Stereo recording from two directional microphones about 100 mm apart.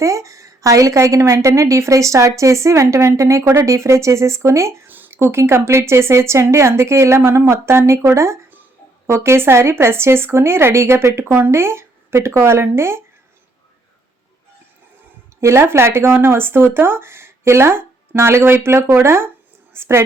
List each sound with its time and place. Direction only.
0.0 s a woman's voice: 30° right (ahead or behind)
15.4 s a woman's voice: 25° right (ahead or behind)